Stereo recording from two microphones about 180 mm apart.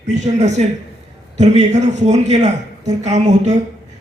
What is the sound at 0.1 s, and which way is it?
A man's voice, 40° right (ahead or behind).